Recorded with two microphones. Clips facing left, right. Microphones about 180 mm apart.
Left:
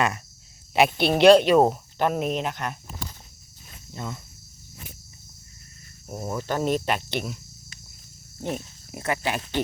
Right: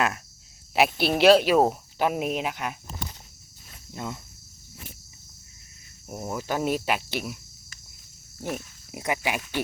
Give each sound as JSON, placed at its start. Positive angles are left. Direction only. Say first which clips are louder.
{"t": 0.7, "sound": "speech", "louder": "left 2 dB", "side_deg": -5}
{"t": 3.9, "sound": "speech", "louder": "even", "side_deg": -15}
{"t": 6.1, "sound": "speech", "louder": "left 1 dB", "side_deg": -15}
{"t": 8.4, "sound": "pig", "louder": "left 2 dB", "side_deg": 20}
{"t": 8.9, "sound": "speech", "louder": "left 1 dB", "side_deg": -15}